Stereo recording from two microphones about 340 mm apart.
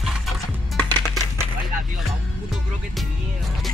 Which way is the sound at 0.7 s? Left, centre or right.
Centre.